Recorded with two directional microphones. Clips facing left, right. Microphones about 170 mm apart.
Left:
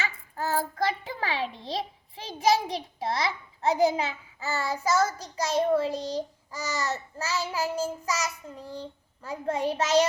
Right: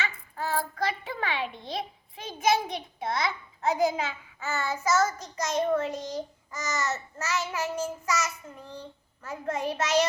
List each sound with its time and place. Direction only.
0.0 s child singing: 40° left (ahead or behind)
1.1 s a child's voice: 35° left (ahead or behind)